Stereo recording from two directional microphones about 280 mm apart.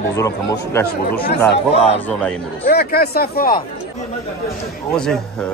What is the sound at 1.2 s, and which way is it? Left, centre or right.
Speech, left.